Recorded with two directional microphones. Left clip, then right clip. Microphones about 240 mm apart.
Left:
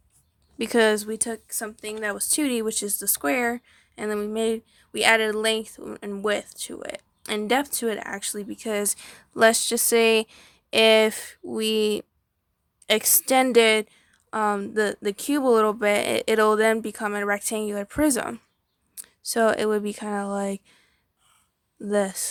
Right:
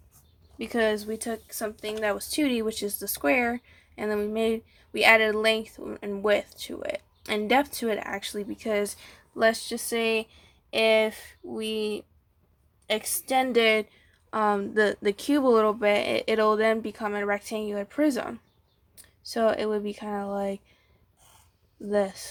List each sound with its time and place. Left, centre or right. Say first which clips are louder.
0.6 s a woman's voice: left 5 dB; left
14.3 s a woman's voice: left 1 dB; centre
21.8 s speech: left 2 dB; left